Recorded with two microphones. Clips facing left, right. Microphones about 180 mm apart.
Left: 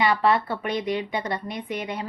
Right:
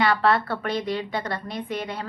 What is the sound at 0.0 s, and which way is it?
A woman's voice, 15° left (ahead or behind).